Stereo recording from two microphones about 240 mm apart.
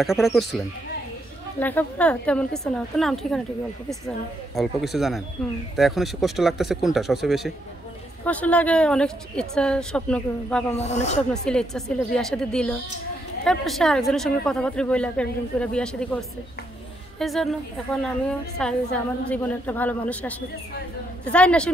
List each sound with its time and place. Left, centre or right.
0.0 s speech: centre
1.6 s speech: centre
4.6 s speech: centre
10.8 s speech: left
11.4 s speech: centre
18.6 s a man's voice: centre